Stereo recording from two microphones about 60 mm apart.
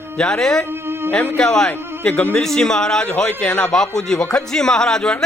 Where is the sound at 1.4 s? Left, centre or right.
Centre.